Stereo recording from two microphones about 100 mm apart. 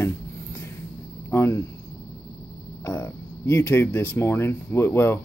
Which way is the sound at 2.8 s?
25° left (ahead or behind).